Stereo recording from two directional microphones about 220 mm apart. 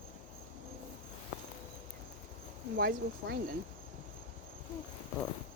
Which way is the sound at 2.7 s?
45° right (ahead or behind).